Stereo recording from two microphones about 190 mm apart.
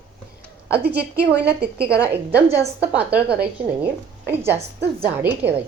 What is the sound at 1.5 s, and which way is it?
Speech, 55° right (ahead or behind).